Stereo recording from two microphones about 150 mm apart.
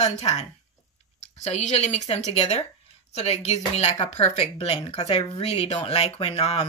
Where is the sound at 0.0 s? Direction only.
45° left (ahead or behind).